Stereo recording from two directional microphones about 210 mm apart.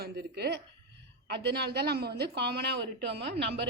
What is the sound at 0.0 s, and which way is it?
Speech, 50° right (ahead or behind).